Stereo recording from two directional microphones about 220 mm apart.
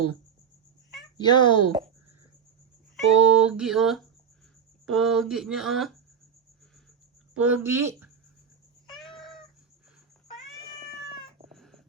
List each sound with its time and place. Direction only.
1.2 s a child's voice: 20° left (ahead or behind)
2.9 s music: 5° right (ahead or behind)
7.3 s speech: 5° right (ahead or behind)
9.0 s cat: centre (ahead or behind)
11.4 s a sound: centre (ahead or behind)